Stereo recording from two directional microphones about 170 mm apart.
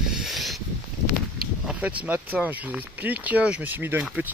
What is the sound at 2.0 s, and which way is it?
Speech, 10° right (ahead or behind).